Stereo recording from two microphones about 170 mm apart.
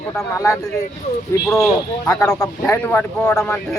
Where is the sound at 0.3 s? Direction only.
15° left (ahead or behind).